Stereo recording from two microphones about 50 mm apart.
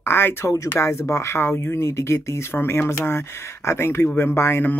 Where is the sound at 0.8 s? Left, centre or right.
Left.